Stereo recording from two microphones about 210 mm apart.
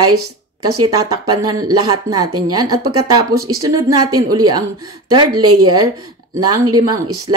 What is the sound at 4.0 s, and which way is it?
Speech, 90° right.